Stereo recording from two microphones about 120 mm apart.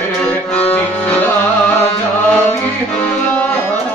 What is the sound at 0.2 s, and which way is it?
Music, 15° left (ahead or behind).